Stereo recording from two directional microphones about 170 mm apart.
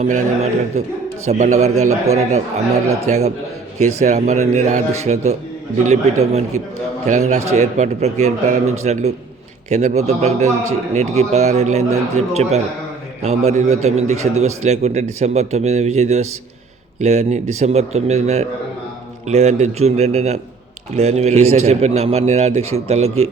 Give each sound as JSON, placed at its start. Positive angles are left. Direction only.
{"t": 0.0, "sound": "a man's voice", "side_deg": -45}